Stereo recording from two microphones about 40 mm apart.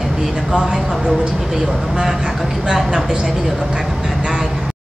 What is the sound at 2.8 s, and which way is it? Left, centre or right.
Speech, centre.